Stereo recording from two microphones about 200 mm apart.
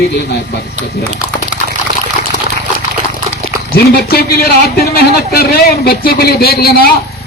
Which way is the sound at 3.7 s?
50° left (ahead or behind).